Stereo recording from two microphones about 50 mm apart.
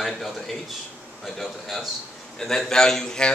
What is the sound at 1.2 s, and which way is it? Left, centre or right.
A man's voice, centre.